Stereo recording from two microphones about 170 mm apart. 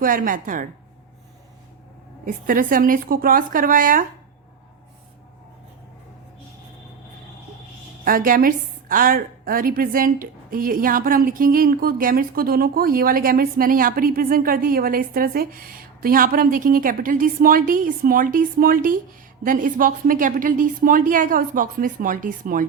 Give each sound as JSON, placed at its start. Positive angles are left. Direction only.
{"t": 0.0, "sound": "a woman's voice", "side_deg": -55}
{"t": 2.2, "sound": "a woman's voice", "side_deg": -55}
{"t": 8.0, "sound": "a woman's voice", "side_deg": -55}